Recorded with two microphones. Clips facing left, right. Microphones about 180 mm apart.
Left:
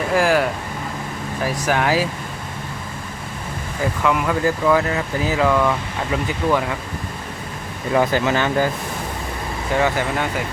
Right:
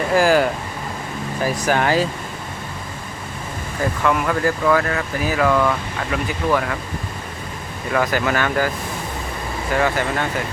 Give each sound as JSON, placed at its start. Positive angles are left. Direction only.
{"t": 0.1, "sound": "speech", "side_deg": 0}
{"t": 4.0, "sound": "speech", "side_deg": 15}
{"t": 5.5, "sound": "speech", "side_deg": 10}
{"t": 7.9, "sound": "speech", "side_deg": 20}
{"t": 9.7, "sound": "speech", "side_deg": 15}